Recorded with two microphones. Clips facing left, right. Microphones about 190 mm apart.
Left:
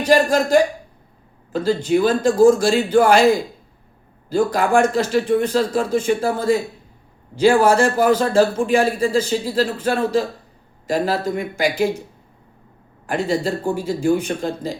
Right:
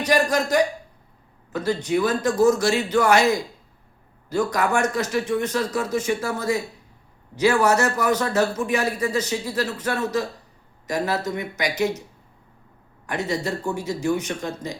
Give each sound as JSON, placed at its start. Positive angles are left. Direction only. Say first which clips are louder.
{"t": 0.0, "sound": "a man's voice", "louder": "left 5 dB", "side_deg": 30}
{"t": 13.1, "sound": "speech", "louder": "left 5 dB", "side_deg": 30}